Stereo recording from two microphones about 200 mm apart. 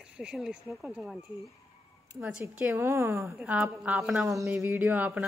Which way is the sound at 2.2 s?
5° right (ahead or behind).